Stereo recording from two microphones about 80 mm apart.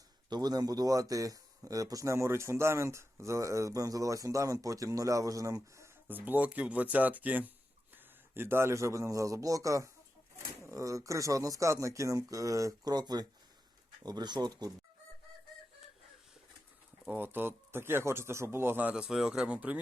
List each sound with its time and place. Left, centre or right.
0.3 s speech: right
6.1 s a man's voice: right
17.1 s speech: right; by 19.5 s centre
19.5 s speech: centre